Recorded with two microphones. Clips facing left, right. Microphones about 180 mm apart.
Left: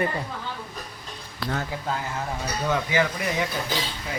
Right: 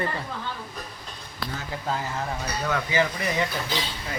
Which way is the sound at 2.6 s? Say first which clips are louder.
Left 2 dB; 15° left (ahead or behind).